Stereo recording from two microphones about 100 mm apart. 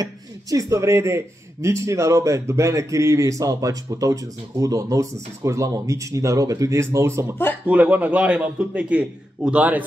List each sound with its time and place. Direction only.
0.0 s a man's voice: 35° right (ahead or behind)
7.6 s a man's voice: 15° right (ahead or behind)